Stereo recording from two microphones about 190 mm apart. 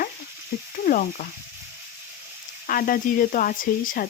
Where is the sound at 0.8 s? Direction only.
45° left (ahead or behind).